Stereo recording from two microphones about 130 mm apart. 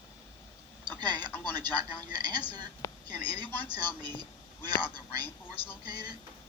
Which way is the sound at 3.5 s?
15° left (ahead or behind).